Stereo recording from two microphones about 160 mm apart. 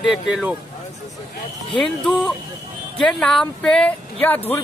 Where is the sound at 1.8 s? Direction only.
10° left (ahead or behind).